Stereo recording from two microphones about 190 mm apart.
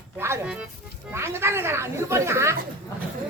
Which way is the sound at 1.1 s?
15° right (ahead or behind).